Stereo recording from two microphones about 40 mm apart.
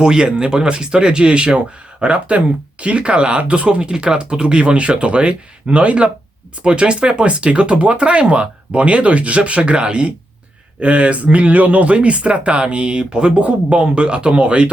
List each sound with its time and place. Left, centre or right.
0.0 s speech: right